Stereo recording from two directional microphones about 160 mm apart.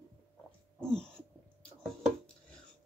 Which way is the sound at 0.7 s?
5° left (ahead or behind).